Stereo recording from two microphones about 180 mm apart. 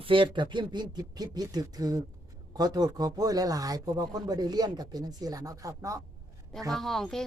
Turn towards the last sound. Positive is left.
turn(degrees=0)  # may be behind; listen again after turning